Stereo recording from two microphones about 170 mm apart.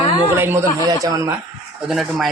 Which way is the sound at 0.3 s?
15° right (ahead or behind).